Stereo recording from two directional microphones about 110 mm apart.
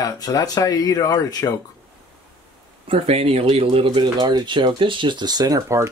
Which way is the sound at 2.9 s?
65° right (ahead or behind).